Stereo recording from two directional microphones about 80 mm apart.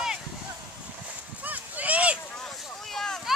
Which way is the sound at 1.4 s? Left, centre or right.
Centre.